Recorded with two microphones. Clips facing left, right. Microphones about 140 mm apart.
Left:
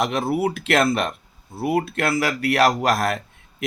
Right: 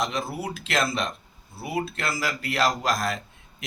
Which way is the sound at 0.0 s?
60° left (ahead or behind).